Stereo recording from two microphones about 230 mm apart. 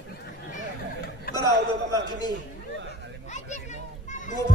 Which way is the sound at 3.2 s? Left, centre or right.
Left.